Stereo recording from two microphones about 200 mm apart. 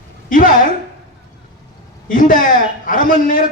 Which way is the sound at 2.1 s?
40° left (ahead or behind).